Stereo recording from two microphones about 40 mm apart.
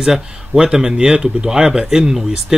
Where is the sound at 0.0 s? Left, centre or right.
Centre.